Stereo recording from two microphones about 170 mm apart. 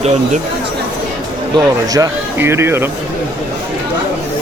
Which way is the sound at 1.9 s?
15° right (ahead or behind).